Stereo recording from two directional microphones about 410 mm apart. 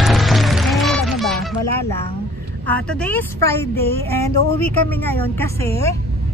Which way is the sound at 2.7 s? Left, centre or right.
Centre.